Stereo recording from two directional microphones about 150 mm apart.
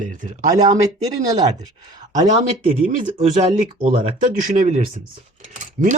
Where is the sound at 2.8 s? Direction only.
60° right (ahead or behind).